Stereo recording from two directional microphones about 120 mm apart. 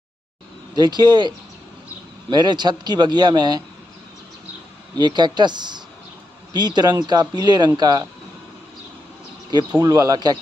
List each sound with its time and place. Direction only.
0.7 s speech: 35° right (ahead or behind)
4.9 s speech: 35° right (ahead or behind)
9.8 s speech: 30° right (ahead or behind)